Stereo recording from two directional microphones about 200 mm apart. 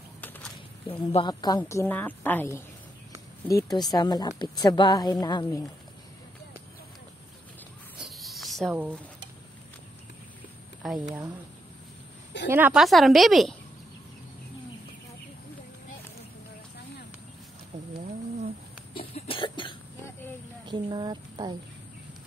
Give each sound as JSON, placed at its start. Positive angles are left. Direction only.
{"t": 0.2, "sound": "a sound", "side_deg": 10}
{"t": 0.9, "sound": "a woman's voice", "side_deg": 25}
{"t": 8.0, "sound": "a sound", "side_deg": 0}
{"t": 10.8, "sound": "a woman's voice", "side_deg": 0}
{"t": 12.4, "sound": "a woman's voice", "side_deg": -10}
{"t": 18.9, "sound": "cough", "side_deg": 25}
{"t": 20.6, "sound": "speech", "side_deg": -20}